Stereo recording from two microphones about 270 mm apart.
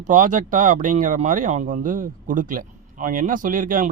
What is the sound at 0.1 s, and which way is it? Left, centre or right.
Speech, right.